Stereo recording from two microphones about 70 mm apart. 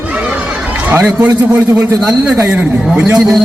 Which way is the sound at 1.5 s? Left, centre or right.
Right.